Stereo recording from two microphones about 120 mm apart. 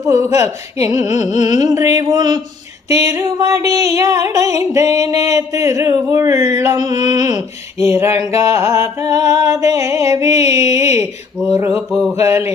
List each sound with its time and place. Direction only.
0.0 s music: 25° right (ahead or behind)
1.3 s carnatic music: 35° right (ahead or behind)
2.9 s music: 25° right (ahead or behind)